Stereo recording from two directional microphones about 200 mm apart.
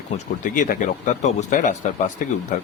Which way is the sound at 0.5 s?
40° left (ahead or behind).